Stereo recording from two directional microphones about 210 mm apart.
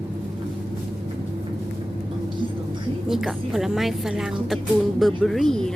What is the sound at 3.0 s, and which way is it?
A woman's voice, centre (ahead or behind).